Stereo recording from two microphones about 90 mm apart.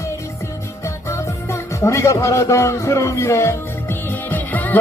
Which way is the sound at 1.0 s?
30° left (ahead or behind).